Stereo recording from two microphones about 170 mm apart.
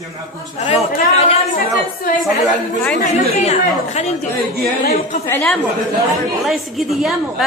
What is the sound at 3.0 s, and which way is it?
Speech, 40° left (ahead or behind).